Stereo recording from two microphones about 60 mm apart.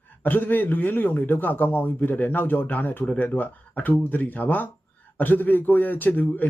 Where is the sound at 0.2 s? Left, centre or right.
Left.